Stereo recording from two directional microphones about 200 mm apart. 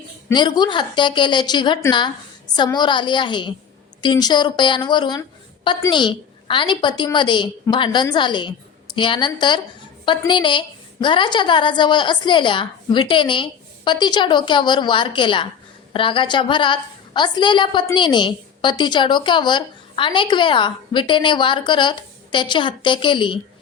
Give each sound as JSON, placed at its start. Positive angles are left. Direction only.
{"t": 0.3, "sound": "a woman's voice", "side_deg": 20}